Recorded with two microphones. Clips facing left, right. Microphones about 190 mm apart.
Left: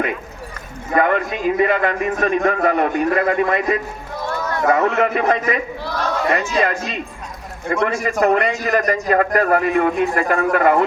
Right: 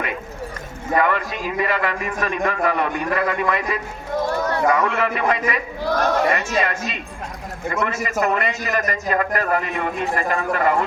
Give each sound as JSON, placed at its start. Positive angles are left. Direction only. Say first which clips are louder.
{"t": 0.9, "sound": "a man's voice", "louder": "left 3 dB", "side_deg": 50}
{"t": 4.3, "sound": "a sound", "louder": "left 1 dB", "side_deg": -35}
{"t": 4.7, "sound": "a man's voice", "louder": "left 4 dB", "side_deg": 45}
{"t": 5.8, "sound": "speech", "louder": "right 3 dB", "side_deg": -45}
{"t": 6.3, "sound": "a man's voice", "louder": "left 3 dB", "side_deg": 45}